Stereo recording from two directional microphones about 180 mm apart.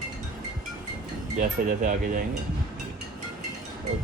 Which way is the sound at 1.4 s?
45° right (ahead or behind).